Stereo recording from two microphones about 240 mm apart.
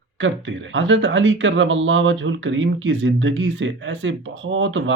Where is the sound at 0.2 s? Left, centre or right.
Right.